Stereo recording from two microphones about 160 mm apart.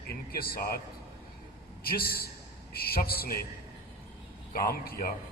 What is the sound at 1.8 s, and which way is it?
A man's voice, 70° left (ahead or behind).